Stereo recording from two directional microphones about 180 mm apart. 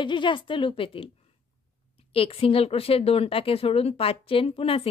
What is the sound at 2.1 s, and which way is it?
A woman's voice, 30° left (ahead or behind).